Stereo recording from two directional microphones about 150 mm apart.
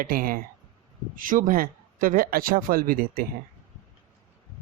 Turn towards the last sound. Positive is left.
turn(degrees=-75)  # may be behind; listen again after turning